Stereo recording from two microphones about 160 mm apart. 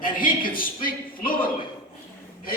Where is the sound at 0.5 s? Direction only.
65° left (ahead or behind).